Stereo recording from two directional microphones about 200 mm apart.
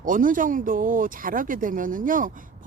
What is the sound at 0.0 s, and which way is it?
Speech, 40° right (ahead or behind).